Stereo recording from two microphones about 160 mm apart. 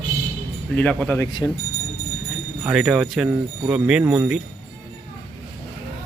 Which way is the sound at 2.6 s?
5° right (ahead or behind).